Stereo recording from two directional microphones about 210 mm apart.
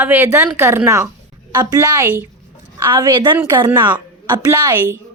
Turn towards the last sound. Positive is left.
turn(degrees=-15)  # may be behind; listen again after turning